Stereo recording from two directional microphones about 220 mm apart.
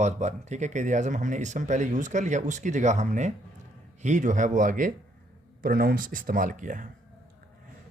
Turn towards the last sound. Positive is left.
turn(degrees=-35)  # may be behind; listen again after turning